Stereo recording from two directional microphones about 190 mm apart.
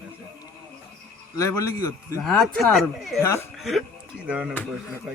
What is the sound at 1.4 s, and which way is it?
Speech, 15° left (ahead or behind).